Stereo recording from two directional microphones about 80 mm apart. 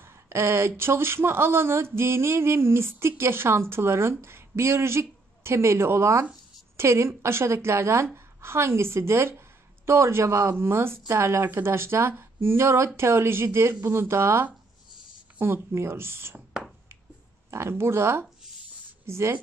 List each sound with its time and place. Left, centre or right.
0.0 s speech: right
16.3 s a sound: centre
17.5 s speech: right